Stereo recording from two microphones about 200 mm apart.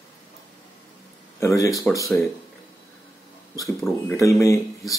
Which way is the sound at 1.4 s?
15° left (ahead or behind).